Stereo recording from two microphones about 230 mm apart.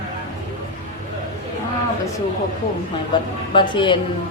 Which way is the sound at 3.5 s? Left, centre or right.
Left.